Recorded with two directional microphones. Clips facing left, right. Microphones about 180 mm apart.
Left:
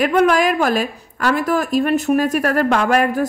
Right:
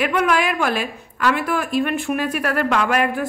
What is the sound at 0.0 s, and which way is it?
A woman's voice, 40° left (ahead or behind).